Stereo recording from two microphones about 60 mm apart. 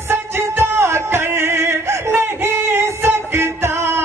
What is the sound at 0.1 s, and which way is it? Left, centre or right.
Music, right.